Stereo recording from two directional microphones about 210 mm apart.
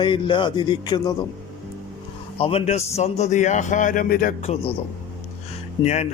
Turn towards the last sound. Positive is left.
turn(degrees=30)  # may be behind; listen again after turning